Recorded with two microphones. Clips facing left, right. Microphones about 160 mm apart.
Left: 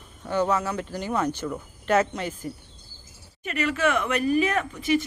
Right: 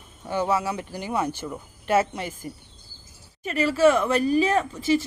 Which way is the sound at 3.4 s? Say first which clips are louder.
Right 6 dB; 30° right (ahead or behind).